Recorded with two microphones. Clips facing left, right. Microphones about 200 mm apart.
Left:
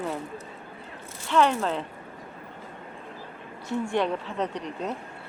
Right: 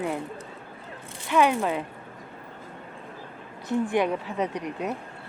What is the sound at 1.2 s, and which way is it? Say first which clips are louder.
Speech: right 1 dB; 10° right (ahead or behind).